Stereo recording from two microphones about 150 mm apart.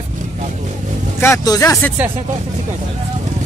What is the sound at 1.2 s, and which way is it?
Speech, 20° left (ahead or behind).